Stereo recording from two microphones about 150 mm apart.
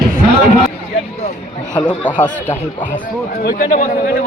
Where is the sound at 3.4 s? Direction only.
60° left (ahead or behind).